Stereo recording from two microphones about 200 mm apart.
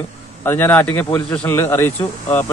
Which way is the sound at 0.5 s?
10° left (ahead or behind).